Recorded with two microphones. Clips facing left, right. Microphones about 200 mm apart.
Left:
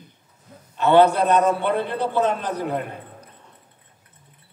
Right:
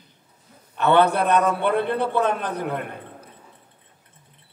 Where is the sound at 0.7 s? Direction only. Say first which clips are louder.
Left 3 dB; 60° right (ahead or behind).